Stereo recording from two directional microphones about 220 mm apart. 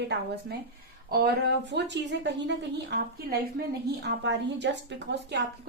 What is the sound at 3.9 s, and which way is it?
A woman's voice, 50° right (ahead or behind).